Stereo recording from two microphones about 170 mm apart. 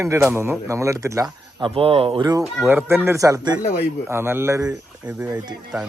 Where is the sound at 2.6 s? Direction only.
10° right (ahead or behind).